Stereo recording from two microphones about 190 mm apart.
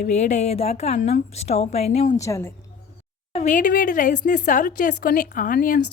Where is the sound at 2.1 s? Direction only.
15° left (ahead or behind).